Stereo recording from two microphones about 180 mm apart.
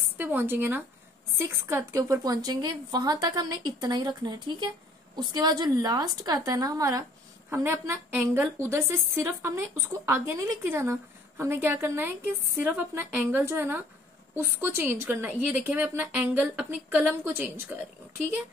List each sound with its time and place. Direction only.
0.2 s a woman's voice: 10° right (ahead or behind)